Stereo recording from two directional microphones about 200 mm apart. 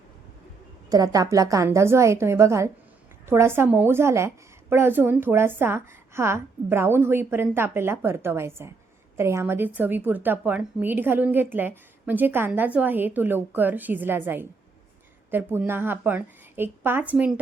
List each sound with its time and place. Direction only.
0.9 s a woman's voice: 20° right (ahead or behind)